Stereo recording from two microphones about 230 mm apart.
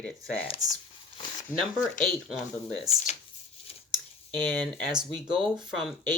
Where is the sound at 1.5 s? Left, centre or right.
Centre.